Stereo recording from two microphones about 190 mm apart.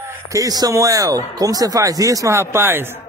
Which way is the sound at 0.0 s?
15° right (ahead or behind).